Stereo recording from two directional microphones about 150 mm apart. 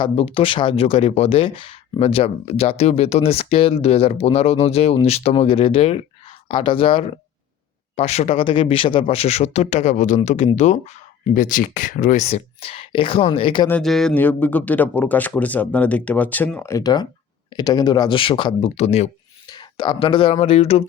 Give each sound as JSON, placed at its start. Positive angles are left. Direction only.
{"t": 0.0, "sound": "speech", "side_deg": 40}
{"t": 13.7, "sound": "speech", "side_deg": 5}
{"t": 16.7, "sound": "speech", "side_deg": 25}
{"t": 19.5, "sound": "speech", "side_deg": 30}